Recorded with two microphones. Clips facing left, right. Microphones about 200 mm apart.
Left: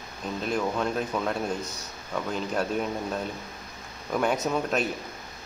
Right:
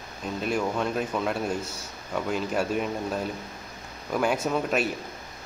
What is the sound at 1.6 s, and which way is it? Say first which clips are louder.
Speech: right 1 dB; 25° right (ahead or behind).